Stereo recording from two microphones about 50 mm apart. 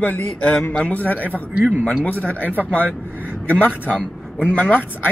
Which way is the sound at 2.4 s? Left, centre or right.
Right.